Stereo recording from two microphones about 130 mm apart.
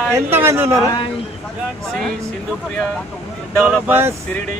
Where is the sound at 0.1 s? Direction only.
20° right (ahead or behind).